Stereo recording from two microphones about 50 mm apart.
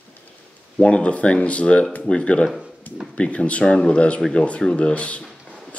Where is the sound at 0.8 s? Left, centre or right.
Left.